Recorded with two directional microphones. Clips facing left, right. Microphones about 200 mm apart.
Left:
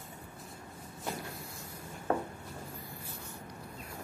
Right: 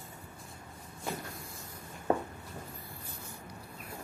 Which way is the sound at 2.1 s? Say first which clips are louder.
Right 2 dB; 20° right (ahead or behind).